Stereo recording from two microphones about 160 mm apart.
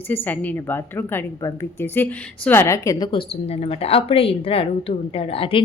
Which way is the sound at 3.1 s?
35° left (ahead or behind).